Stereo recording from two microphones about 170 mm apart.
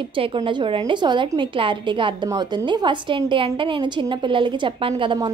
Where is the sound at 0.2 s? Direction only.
30° right (ahead or behind).